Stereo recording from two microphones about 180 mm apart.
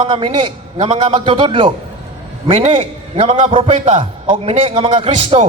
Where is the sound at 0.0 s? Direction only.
30° right (ahead or behind).